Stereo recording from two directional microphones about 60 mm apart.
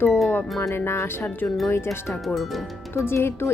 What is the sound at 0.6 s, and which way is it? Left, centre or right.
Speech, left.